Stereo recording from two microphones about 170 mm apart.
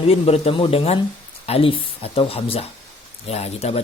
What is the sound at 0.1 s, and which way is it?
Speech, 35° left (ahead or behind).